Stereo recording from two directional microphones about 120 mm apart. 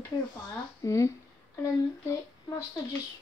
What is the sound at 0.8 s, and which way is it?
Speech, 25° left (ahead or behind).